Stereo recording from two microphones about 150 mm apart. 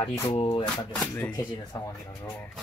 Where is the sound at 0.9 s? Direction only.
10° left (ahead or behind).